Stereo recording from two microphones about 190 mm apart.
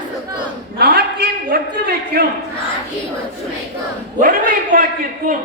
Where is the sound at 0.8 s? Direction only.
55° right (ahead or behind).